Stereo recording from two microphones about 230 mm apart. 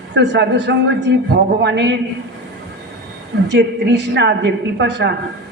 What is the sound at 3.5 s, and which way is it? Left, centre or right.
A man's voice, right.